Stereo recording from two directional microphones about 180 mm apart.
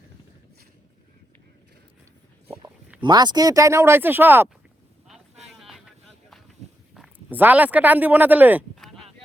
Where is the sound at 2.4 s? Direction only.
15° right (ahead or behind).